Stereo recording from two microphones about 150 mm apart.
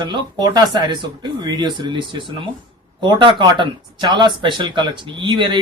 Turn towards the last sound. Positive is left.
turn(degrees=-30)  # may be behind; listen again after turning